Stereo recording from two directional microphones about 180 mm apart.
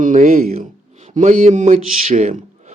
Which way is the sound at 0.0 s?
45° right (ahead or behind).